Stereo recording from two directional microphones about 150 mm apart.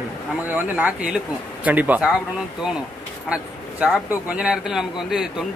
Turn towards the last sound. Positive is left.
turn(degrees=-5)  # may be behind; listen again after turning